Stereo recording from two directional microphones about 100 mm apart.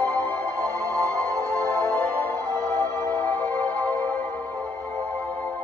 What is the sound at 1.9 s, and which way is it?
Music, 20° left (ahead or behind).